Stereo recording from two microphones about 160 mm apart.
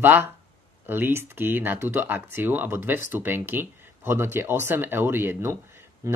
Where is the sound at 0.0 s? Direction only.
10° right (ahead or behind).